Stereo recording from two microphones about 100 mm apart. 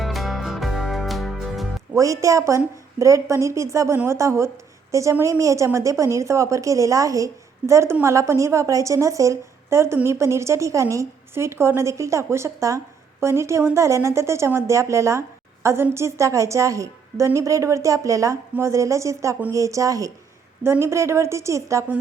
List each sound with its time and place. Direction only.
0.0 s music: centre (ahead or behind)
2.0 s a woman's voice: 35° right (ahead or behind)